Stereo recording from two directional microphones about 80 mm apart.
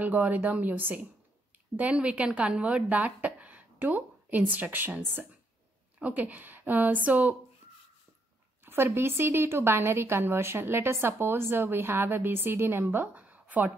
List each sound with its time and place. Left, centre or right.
0.0 s a woman's voice: right
8.6 s a woman's voice: right